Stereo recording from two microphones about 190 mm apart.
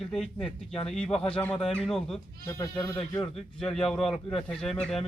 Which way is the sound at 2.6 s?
15° left (ahead or behind).